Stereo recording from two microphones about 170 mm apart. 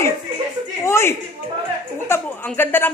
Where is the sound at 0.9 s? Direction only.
15° left (ahead or behind).